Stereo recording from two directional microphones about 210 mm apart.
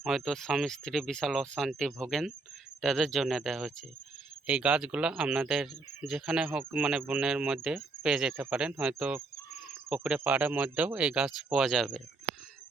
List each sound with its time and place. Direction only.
0.0 s speech: centre (ahead or behind)